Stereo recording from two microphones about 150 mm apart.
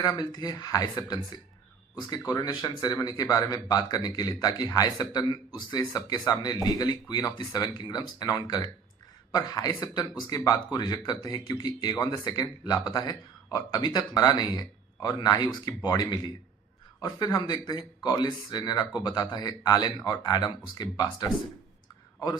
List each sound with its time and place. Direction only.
0.0 s speech: 25° left (ahead or behind)